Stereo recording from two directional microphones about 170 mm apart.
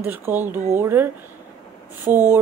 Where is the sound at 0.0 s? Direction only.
10° right (ahead or behind).